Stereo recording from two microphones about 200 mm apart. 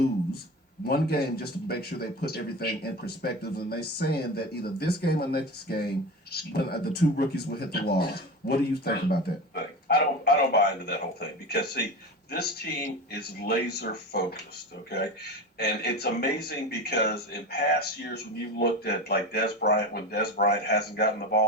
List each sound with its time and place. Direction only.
0.9 s speech: 50° left (ahead or behind)